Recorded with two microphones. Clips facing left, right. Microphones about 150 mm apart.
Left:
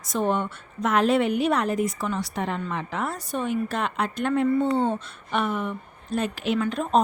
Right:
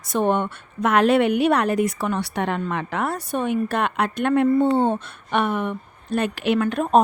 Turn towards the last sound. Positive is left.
turn(degrees=-55)  # may be behind; listen again after turning